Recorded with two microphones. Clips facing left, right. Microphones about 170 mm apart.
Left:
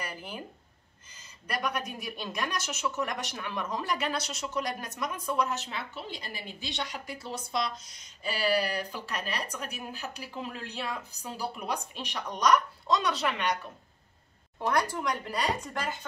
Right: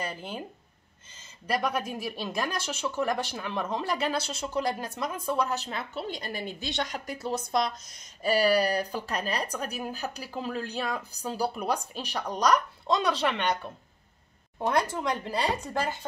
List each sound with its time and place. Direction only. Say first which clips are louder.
0.0 s speech: right 4 dB; 25° right (ahead or behind)
14.6 s speech: right 2 dB; 25° right (ahead or behind)